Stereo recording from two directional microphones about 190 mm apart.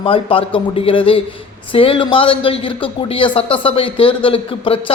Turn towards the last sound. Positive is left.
turn(degrees=30)  # may be behind; listen again after turning